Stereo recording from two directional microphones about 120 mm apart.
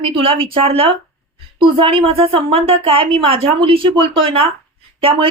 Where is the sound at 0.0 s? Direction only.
50° right (ahead or behind).